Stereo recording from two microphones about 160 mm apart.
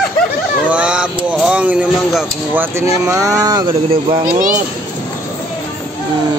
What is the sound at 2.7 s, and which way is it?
Speech, 20° right (ahead or behind).